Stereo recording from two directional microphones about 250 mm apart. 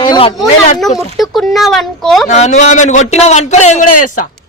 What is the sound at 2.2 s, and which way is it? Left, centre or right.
A man's voice, left.